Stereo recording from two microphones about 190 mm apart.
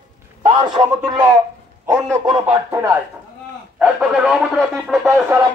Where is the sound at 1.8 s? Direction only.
20° right (ahead or behind).